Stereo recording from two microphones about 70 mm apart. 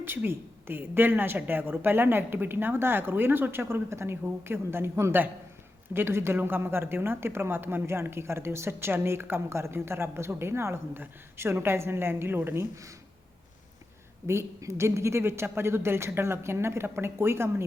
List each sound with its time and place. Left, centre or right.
0.0 s a woman's voice: right
14.3 s a woman's voice: right